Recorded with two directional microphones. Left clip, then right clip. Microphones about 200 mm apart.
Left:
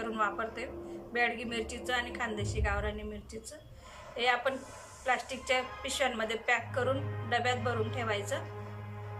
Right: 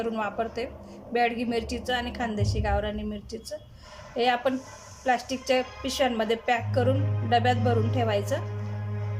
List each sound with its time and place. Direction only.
0.0 s a woman's voice: 30° right (ahead or behind)
4.2 s a woman's voice: 25° right (ahead or behind)